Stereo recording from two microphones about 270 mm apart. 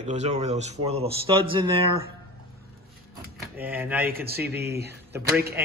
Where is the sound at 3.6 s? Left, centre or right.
Centre.